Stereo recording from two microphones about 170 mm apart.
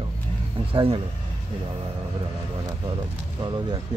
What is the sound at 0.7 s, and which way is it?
Speech, 30° right (ahead or behind).